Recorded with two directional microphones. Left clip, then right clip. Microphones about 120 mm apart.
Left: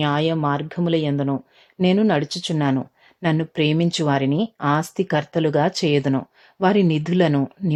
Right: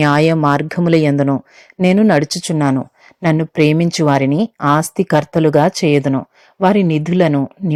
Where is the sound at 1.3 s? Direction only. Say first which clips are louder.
Right 7 dB; 30° right (ahead or behind).